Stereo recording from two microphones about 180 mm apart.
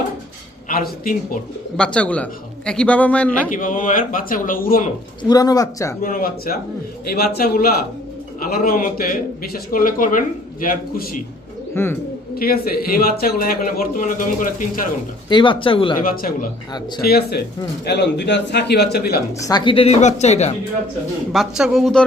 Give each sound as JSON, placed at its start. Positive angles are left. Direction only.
{"t": 0.7, "sound": "a man's voice", "side_deg": 50}
{"t": 1.7, "sound": "a man's voice", "side_deg": 5}
{"t": 3.5, "sound": "a man's voice", "side_deg": 50}
{"t": 5.3, "sound": "speech", "side_deg": 20}
{"t": 6.0, "sound": "a man's voice", "side_deg": 50}
{"t": 11.7, "sound": "speech", "side_deg": 10}
{"t": 12.4, "sound": "a man's voice", "side_deg": 55}
{"t": 15.3, "sound": "speech", "side_deg": 25}
{"t": 16.0, "sound": "a man's voice", "side_deg": 55}
{"t": 17.8, "sound": "speech", "side_deg": 75}
{"t": 19.5, "sound": "speech", "side_deg": 25}
{"t": 21.3, "sound": "speech", "side_deg": 0}